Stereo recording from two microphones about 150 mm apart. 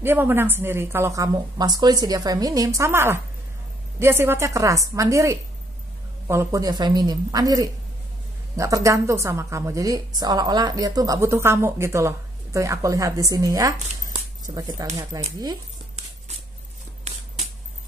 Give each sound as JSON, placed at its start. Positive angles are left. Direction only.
{"t": 0.0, "sound": "a woman's voice", "side_deg": -15}